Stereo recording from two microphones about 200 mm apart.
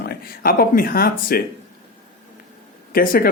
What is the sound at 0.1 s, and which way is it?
Speech, 50° left (ahead or behind).